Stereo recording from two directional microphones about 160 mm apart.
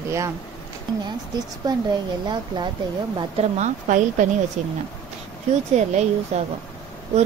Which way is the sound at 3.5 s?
50° right (ahead or behind).